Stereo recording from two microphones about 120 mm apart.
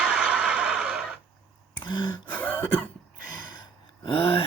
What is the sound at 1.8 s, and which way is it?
Gasp, 40° left (ahead or behind).